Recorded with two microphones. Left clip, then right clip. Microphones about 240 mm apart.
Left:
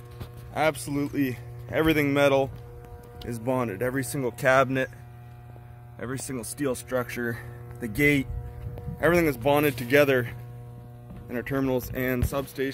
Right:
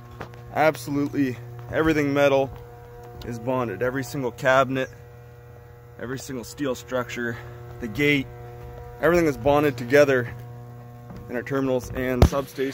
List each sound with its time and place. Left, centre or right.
0.5 s speech: centre
0.8 s speech: centre
5.9 s speech: left
9.0 s speech: centre; by 12.4 s left